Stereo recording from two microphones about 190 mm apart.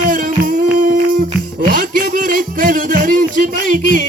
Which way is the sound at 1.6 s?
45° right (ahead or behind).